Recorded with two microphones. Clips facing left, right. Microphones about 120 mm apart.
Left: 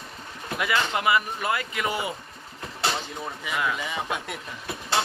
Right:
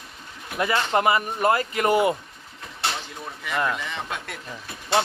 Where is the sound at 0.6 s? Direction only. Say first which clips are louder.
Right 4 dB; 40° right (ahead or behind).